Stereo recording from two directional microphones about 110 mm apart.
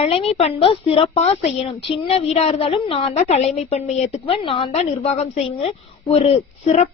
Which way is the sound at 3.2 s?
85° left.